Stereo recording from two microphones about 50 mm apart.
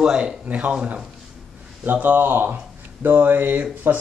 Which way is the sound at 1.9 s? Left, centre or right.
Right.